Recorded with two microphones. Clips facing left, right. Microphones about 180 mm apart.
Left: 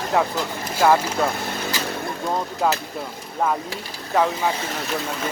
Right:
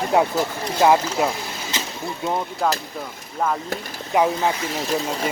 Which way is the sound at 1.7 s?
20° right (ahead or behind).